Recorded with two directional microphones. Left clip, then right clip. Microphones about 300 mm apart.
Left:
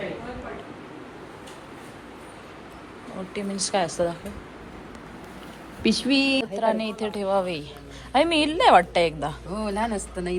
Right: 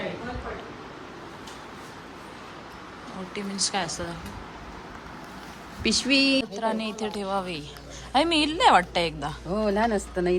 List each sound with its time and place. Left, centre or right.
3.3 s speech: centre
5.8 s speech: centre
6.4 s a woman's voice: centre
9.5 s speech: right